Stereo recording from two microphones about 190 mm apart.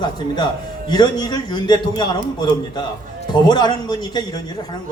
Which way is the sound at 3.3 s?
20° left (ahead or behind).